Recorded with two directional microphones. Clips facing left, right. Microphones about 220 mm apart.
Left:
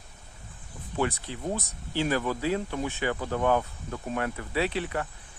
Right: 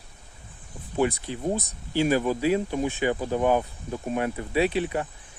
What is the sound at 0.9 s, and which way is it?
Speech, 15° right (ahead or behind).